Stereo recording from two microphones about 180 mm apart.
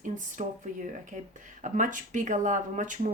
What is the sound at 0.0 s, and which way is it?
Speech, 45° right (ahead or behind).